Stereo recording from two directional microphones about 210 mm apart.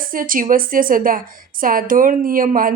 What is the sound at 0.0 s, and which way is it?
Speech, 40° right (ahead or behind).